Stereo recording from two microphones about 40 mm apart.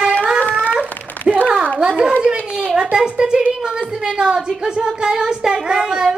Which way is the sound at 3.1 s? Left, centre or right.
Right.